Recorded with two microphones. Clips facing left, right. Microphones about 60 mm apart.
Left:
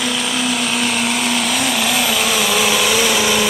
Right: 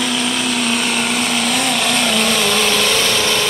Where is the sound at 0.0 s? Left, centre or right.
Centre.